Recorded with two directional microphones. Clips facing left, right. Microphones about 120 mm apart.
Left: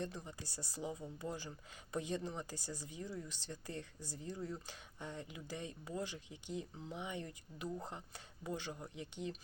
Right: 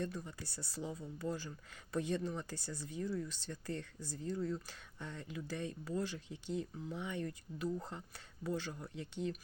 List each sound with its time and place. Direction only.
0.0 s speech: 20° left (ahead or behind)